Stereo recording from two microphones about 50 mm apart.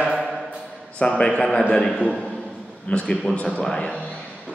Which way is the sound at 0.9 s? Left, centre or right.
Left.